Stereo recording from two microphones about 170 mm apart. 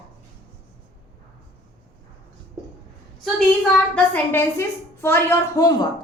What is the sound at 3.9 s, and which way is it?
A woman's voice, 15° left (ahead or behind).